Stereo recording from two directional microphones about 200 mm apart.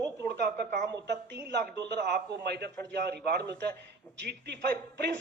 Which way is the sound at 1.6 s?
55° right (ahead or behind).